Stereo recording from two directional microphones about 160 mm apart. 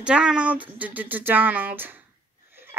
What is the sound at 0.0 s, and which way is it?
A woman's voice, 5° right (ahead or behind).